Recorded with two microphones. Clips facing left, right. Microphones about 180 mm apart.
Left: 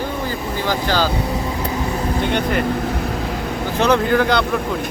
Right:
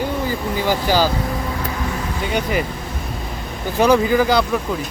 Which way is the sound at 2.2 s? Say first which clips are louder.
Even; 5° right (ahead or behind).